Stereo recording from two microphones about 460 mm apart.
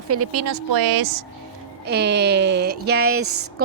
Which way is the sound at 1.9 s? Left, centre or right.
Right.